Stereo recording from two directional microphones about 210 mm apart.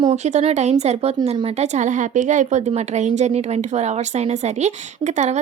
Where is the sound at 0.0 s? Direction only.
30° right (ahead or behind).